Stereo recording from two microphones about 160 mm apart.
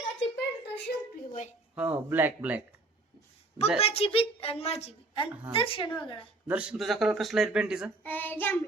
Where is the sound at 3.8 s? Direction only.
40° left (ahead or behind).